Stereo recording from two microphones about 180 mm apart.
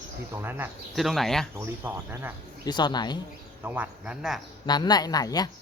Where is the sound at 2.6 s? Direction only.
25° left (ahead or behind).